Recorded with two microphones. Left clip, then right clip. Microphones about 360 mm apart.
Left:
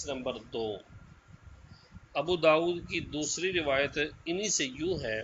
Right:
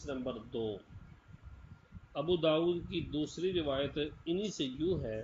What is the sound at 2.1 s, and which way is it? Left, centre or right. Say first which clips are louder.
Speech: left 6 dB; left.